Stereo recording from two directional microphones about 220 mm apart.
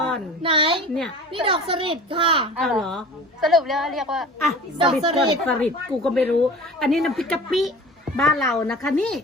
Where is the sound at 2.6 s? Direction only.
Centre (ahead or behind).